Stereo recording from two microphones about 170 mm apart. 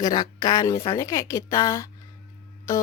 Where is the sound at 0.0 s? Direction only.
25° left (ahead or behind).